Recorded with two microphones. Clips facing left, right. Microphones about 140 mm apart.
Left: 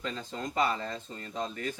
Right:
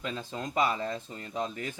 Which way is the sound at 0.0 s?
10° right (ahead or behind).